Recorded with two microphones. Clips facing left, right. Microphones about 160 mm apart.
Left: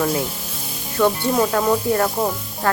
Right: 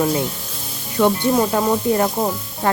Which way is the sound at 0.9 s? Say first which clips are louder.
Right 2 dB; 15° right (ahead or behind).